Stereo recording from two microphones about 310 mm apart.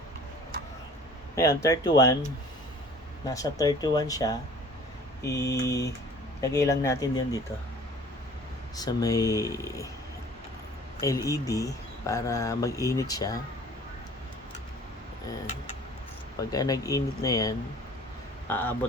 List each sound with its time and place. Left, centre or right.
1.4 s speech: centre
3.2 s speech: centre
5.2 s mantra: left
6.4 s speech: centre
8.7 s speech: centre
10.9 s speech: centre
16.4 s speech: centre